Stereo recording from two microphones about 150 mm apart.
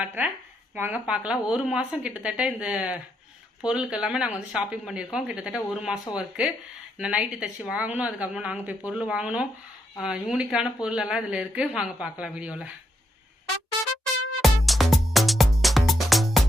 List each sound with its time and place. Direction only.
0.0 s speech: 10° right (ahead or behind)
14.0 s music: centre (ahead or behind)